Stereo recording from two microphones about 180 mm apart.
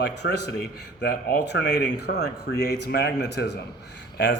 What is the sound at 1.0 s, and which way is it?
Speech, 60° left (ahead or behind).